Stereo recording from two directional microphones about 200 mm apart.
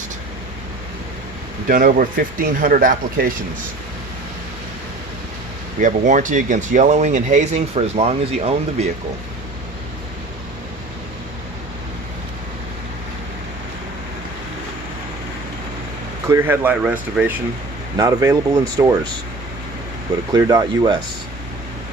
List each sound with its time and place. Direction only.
1.6 s speech: 45° right (ahead or behind)
5.8 s speech: 40° right (ahead or behind)
16.3 s speech: 10° right (ahead or behind)
20.3 s speech: 15° right (ahead or behind)